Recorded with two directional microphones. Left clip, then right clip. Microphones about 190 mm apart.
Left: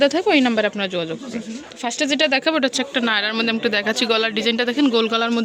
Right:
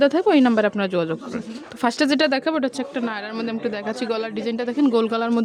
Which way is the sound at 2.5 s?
10° right (ahead or behind).